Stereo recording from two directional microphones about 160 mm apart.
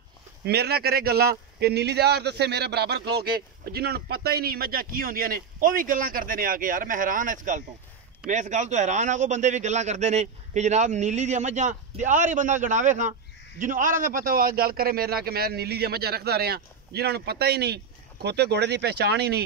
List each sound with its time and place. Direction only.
0.5 s a man's voice: 90° right; by 1.3 s 75° right (ahead or behind)
1.6 s a man's voice: 90° right